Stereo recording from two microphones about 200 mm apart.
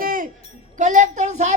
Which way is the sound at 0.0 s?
45° right (ahead or behind).